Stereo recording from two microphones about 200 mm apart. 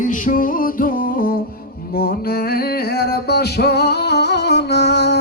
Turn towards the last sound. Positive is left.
turn(degrees=55)  # may be behind; listen again after turning